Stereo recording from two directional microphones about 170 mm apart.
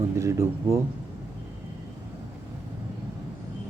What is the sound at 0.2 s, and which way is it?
Speech, 15° right (ahead or behind).